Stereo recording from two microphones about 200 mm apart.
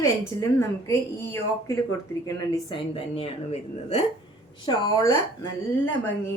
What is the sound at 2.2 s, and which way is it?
A woman's voice, 25° left (ahead or behind).